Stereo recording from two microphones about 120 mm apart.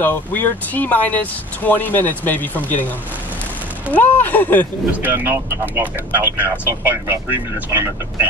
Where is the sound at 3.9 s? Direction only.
15° left (ahead or behind).